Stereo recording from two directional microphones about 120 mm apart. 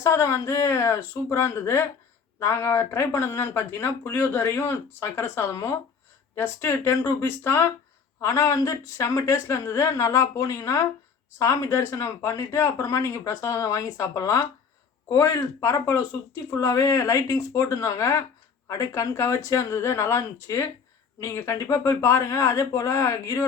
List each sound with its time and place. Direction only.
0.0 s speech: 25° left (ahead or behind)